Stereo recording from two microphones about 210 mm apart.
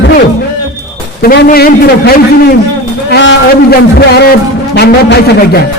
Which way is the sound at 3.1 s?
60° left (ahead or behind).